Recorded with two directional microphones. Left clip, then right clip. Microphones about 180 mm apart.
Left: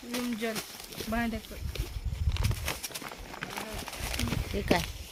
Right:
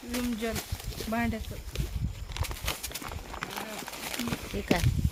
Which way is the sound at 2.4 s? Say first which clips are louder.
Right 1 dB; 20° right (ahead or behind).